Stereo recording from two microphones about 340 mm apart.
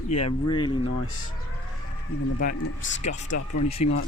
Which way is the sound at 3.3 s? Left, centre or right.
Left.